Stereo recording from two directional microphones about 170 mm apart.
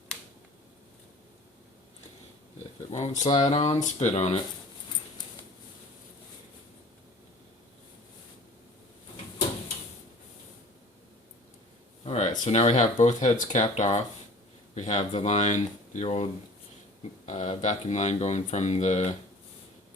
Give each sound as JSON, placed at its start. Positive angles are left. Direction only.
{"t": 2.9, "sound": "speech", "side_deg": 45}
{"t": 12.0, "sound": "a sound", "side_deg": 45}
{"t": 12.5, "sound": "speech", "side_deg": 40}